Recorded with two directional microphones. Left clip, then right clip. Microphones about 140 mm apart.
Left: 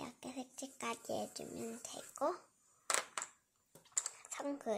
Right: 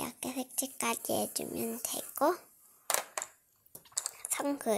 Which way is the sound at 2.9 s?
15° left (ahead or behind).